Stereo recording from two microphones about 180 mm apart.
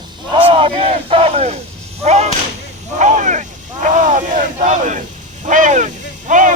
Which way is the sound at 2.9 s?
40° right (ahead or behind).